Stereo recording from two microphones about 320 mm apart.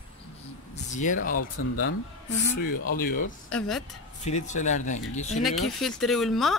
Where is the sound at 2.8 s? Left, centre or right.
Left.